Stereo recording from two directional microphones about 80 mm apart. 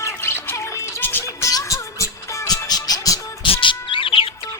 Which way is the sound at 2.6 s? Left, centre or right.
Left.